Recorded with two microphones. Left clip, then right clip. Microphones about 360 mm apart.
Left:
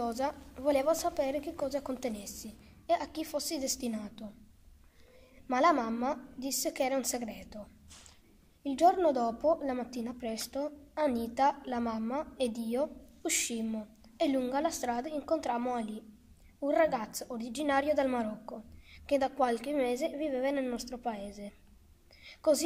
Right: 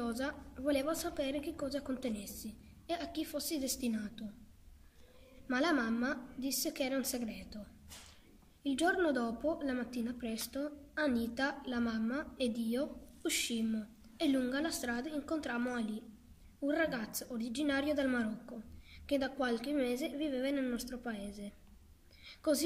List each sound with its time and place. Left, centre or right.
0.0 s a woman's voice: centre
5.5 s a woman's voice: centre
8.6 s a woman's voice: centre
22.2 s a sound: centre